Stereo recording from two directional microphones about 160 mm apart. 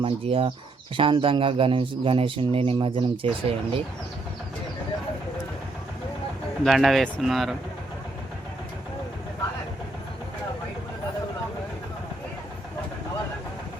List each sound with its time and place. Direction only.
0.0 s a man's voice: 35° right (ahead or behind)
6.7 s speech: centre (ahead or behind)